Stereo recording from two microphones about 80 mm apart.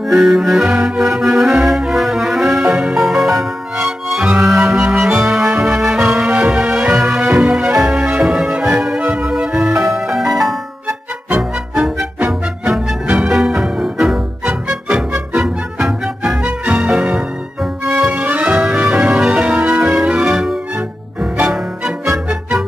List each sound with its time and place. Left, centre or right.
0.1 s music: centre
13.0 s music: centre
13.3 s music: centre